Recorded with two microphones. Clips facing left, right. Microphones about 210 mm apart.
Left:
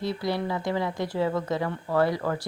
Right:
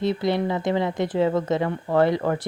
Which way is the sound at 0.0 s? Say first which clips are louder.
Right 5 dB; 20° right (ahead or behind).